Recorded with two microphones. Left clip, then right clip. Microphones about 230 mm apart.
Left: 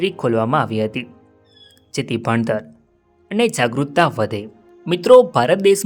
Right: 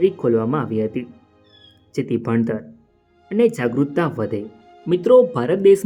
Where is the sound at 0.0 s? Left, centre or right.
Left.